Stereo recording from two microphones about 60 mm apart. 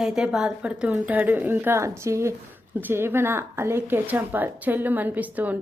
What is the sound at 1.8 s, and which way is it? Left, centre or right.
Speech, right.